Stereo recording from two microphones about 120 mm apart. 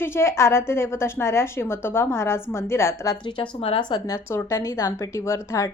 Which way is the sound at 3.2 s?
45° left (ahead or behind).